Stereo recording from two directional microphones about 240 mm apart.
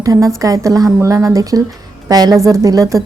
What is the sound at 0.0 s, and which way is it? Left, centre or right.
Speech, centre.